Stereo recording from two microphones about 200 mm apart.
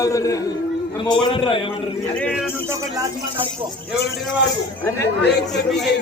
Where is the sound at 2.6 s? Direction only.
15° right (ahead or behind).